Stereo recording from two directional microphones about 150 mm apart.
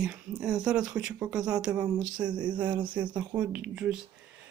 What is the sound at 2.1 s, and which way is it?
Speech, 30° right (ahead or behind).